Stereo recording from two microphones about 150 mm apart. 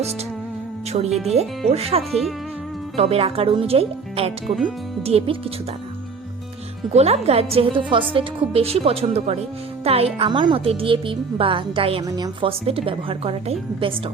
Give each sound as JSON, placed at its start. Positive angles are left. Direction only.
{"t": 0.9, "sound": "a woman's voice", "side_deg": -45}
{"t": 4.4, "sound": "speech", "side_deg": 0}
{"t": 5.0, "sound": "a woman's voice", "side_deg": -40}
{"t": 6.9, "sound": "a woman's voice", "side_deg": -45}
{"t": 12.0, "sound": "a woman's voice", "side_deg": -25}
{"t": 12.5, "sound": "a woman's voice", "side_deg": -40}